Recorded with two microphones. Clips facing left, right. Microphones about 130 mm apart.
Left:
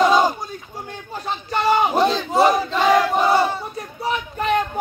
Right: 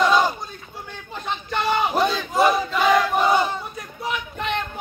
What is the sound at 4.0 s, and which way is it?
Child singing, 40° left (ahead or behind).